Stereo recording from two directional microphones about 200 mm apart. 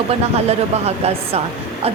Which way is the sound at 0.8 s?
30° right (ahead or behind).